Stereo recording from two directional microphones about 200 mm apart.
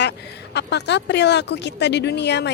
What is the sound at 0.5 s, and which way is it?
A woman's voice, 60° left (ahead or behind).